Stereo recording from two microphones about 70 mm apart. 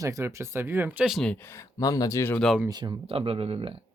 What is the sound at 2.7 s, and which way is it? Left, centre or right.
Speech, right.